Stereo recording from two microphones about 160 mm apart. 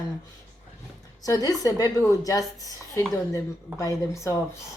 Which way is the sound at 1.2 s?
20° left (ahead or behind).